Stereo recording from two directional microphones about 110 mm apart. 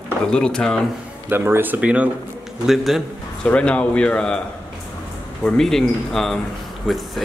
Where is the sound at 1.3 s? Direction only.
20° right (ahead or behind).